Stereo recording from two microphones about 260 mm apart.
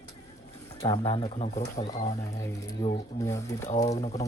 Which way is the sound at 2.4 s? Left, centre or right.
Centre.